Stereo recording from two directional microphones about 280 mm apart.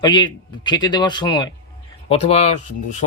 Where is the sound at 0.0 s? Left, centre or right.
Centre.